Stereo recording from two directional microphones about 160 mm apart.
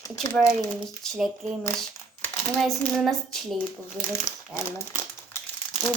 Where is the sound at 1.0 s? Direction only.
Centre (ahead or behind).